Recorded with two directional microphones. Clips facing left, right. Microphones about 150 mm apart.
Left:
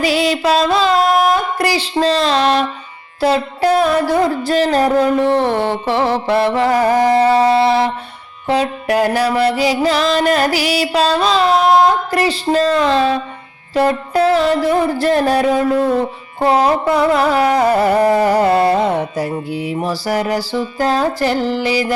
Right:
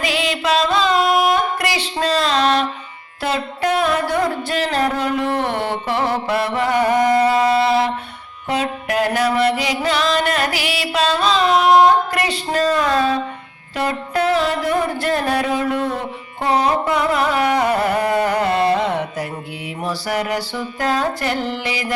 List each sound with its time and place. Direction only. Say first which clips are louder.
0.0 s carnatic music: left 6 dB; 40° left (ahead or behind)